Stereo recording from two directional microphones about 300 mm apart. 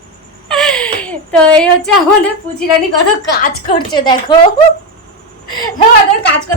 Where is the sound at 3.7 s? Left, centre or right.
Centre.